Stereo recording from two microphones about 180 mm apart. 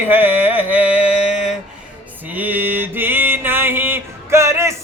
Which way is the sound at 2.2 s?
10° right (ahead or behind).